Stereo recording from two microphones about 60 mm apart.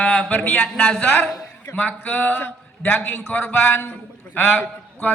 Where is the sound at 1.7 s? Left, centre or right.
Left.